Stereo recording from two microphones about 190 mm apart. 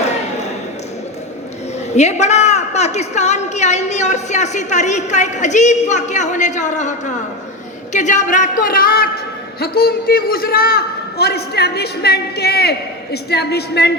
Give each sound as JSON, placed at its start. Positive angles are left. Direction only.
{"t": 2.0, "sound": "a woman's voice", "side_deg": 35}